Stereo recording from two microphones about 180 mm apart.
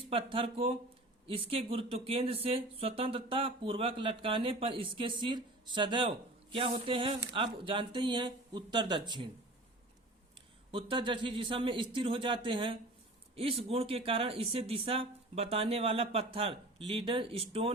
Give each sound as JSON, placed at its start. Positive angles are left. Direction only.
{"t": 0.1, "sound": "speech", "side_deg": -30}
{"t": 10.7, "sound": "speech", "side_deg": -30}